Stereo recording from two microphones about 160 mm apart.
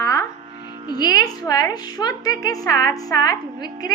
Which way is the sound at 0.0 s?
20° left (ahead or behind).